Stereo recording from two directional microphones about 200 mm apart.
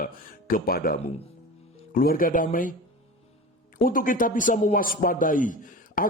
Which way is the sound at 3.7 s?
45° left (ahead or behind).